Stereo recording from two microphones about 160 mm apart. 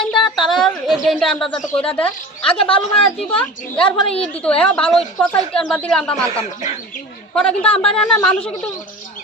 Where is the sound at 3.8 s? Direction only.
35° left (ahead or behind).